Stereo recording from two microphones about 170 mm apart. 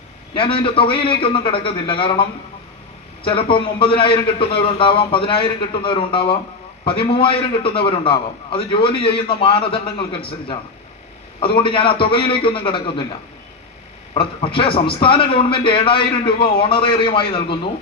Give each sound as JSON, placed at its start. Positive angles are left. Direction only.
{"t": 0.3, "sound": "a man's voice", "side_deg": 30}
{"t": 3.2, "sound": "a man's voice", "side_deg": 30}
{"t": 11.3, "sound": "a man's voice", "side_deg": 30}
{"t": 14.1, "sound": "a man's voice", "side_deg": 30}